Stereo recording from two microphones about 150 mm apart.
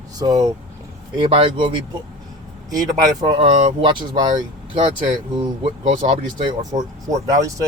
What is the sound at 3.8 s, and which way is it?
Speech, 30° right (ahead or behind).